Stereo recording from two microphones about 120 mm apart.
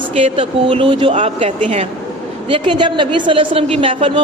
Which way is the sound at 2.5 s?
45° right (ahead or behind).